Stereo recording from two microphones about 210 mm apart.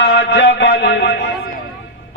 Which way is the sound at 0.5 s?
55° left (ahead or behind).